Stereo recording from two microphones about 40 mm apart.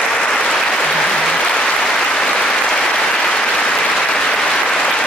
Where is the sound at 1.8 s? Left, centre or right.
Centre.